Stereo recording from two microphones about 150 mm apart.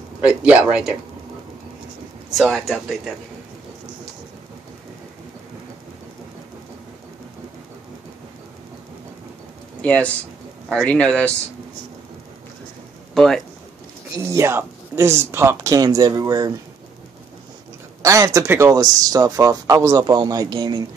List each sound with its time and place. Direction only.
0.2 s speech: 5° right (ahead or behind)
2.3 s speech: centre (ahead or behind)
9.8 s speech: 10° left (ahead or behind)
13.1 s speech: 5° left (ahead or behind)
14.1 s speech: 15° right (ahead or behind)
18.0 s speech: 20° right (ahead or behind)